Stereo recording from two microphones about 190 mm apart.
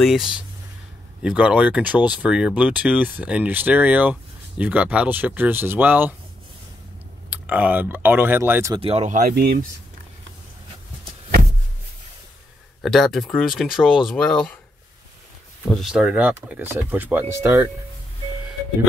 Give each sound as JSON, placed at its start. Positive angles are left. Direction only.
{"t": 0.0, "sound": "speech", "side_deg": 0}
{"t": 7.2, "sound": "speech", "side_deg": -10}
{"t": 8.7, "sound": "speech", "side_deg": -30}
{"t": 9.3, "sound": "speech", "side_deg": -55}
{"t": 12.8, "sound": "speech", "side_deg": 0}
{"t": 15.7, "sound": "speech", "side_deg": 0}